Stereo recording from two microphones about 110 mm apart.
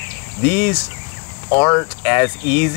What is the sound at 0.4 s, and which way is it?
Speech, 20° left (ahead or behind).